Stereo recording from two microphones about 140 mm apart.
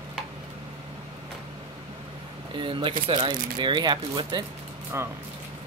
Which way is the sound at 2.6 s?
35° right (ahead or behind).